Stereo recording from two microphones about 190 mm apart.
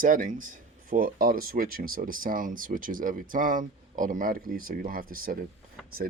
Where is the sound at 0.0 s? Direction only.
45° right (ahead or behind).